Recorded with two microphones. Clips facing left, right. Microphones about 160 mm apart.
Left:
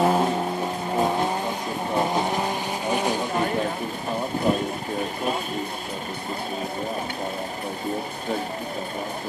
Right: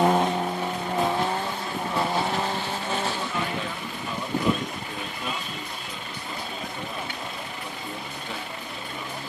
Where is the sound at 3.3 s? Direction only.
40° left (ahead or behind).